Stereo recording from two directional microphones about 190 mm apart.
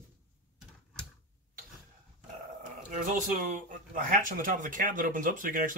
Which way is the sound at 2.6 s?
40° right (ahead or behind).